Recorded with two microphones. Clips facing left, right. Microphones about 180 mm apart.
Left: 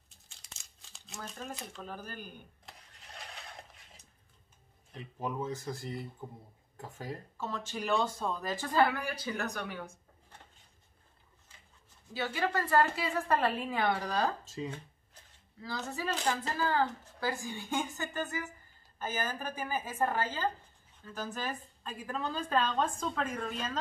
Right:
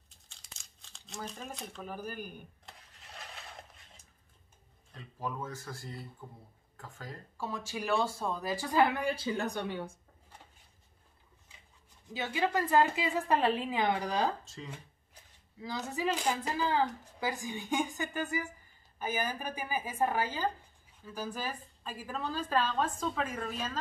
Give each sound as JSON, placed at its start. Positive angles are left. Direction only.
{"t": 0.3, "sound": "crumpling", "side_deg": 0}
{"t": 1.9, "sound": "speech", "side_deg": -10}
{"t": 2.6, "sound": "mechanisms", "side_deg": 0}
{"t": 4.9, "sound": "speech", "side_deg": 20}
{"t": 7.3, "sound": "speech", "side_deg": -10}
{"t": 12.1, "sound": "speech", "side_deg": -15}
{"t": 15.6, "sound": "a woman's voice", "side_deg": -15}